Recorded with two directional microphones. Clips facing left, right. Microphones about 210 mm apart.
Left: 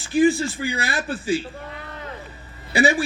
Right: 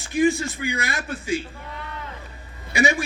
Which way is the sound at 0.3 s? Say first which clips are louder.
Left 2 dB; 35° left (ahead or behind).